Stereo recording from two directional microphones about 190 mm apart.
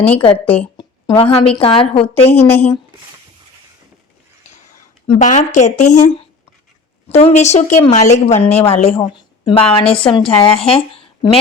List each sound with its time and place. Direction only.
0.4 s speech: 10° left (ahead or behind)
0.8 s speech: 25° left (ahead or behind)
2.3 s speech: 10° left (ahead or behind)
5.0 s a woman's voice: 40° left (ahead or behind)